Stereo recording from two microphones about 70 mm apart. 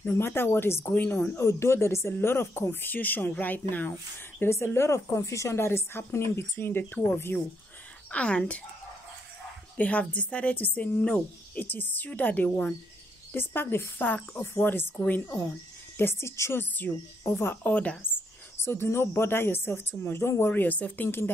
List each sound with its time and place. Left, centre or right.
0.0 s a woman's voice: left
8.1 s speech: centre
9.8 s speech: left
13.3 s speech: left
16.0 s a woman's voice: left
16.9 s speech: centre
18.6 s a woman's voice: left